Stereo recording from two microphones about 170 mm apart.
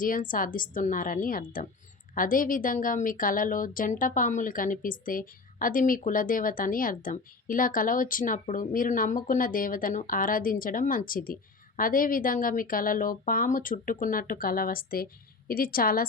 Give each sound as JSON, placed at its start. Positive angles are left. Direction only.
{"t": 0.0, "sound": "a woman's voice", "side_deg": 55}